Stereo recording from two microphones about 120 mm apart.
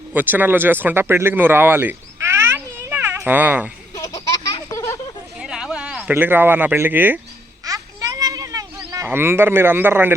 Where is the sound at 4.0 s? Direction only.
30° left (ahead or behind).